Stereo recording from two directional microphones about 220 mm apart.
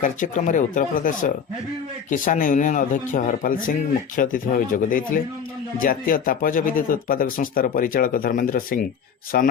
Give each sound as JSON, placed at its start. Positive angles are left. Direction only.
{"t": 0.0, "sound": "speech", "side_deg": 35}